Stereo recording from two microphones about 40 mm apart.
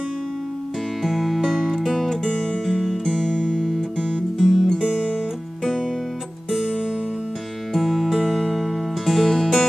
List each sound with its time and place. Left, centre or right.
1.0 s music: centre
2.2 s music: centre
2.6 s music: centre
3.1 s music: centre
4.4 s music: centre
7.7 s music: centre